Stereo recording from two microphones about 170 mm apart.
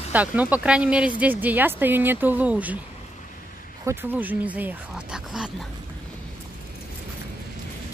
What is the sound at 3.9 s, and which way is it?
Speech, 10° right (ahead or behind).